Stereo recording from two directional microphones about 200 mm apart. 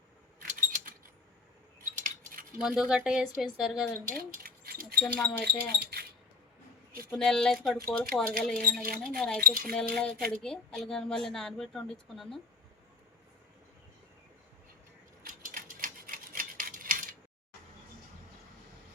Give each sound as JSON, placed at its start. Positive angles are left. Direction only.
{"t": 0.3, "sound": "a sound", "side_deg": -40}
{"t": 2.0, "sound": "cutlery", "side_deg": -40}
{"t": 2.6, "sound": "speech", "side_deg": -5}
{"t": 4.2, "sound": "a sound", "side_deg": -50}
{"t": 4.9, "sound": "speech", "side_deg": 5}
{"t": 5.8, "sound": "speech", "side_deg": -50}
{"t": 7.1, "sound": "speech", "side_deg": 0}
{"t": 9.4, "sound": "speech", "side_deg": -45}
{"t": 9.9, "sound": "speech", "side_deg": 5}
{"t": 15.2, "sound": "a sound", "side_deg": -45}